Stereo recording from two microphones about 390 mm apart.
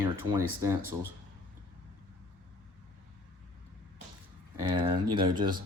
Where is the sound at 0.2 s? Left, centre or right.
Centre.